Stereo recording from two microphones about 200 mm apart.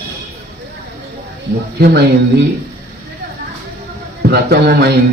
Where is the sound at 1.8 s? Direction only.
55° right (ahead or behind).